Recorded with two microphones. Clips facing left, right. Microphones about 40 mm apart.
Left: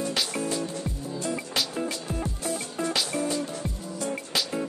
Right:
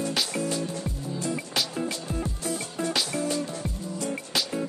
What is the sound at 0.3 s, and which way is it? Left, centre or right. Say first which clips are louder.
Music: even; left.